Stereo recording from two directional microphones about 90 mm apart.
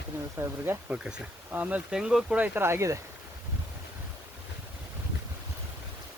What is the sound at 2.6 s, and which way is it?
Speech, 30° right (ahead or behind).